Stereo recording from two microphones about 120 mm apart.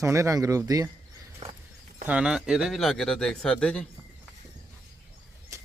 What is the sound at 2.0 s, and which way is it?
Speech, 10° right (ahead or behind).